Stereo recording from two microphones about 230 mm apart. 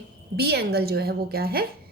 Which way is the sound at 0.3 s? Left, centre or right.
Right.